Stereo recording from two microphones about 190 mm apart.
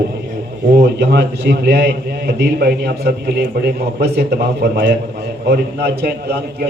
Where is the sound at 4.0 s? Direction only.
60° right (ahead or behind).